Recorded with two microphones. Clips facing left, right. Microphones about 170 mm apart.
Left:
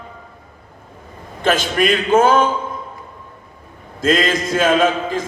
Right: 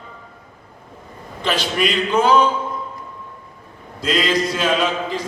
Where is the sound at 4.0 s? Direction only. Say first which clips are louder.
Left 2 dB; 50° left (ahead or behind).